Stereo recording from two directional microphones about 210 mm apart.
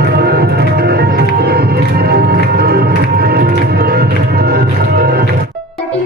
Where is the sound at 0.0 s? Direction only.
50° right (ahead or behind).